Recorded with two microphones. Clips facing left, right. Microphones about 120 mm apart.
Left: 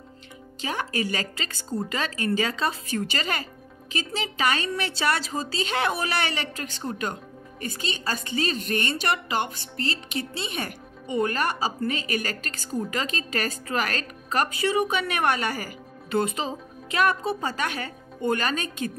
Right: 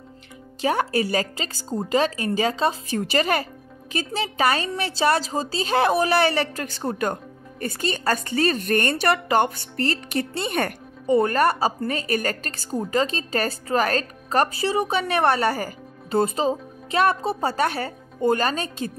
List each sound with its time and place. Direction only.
0.6 s a woman's voice: 40° right (ahead or behind)
11.1 s speech: 40° right (ahead or behind)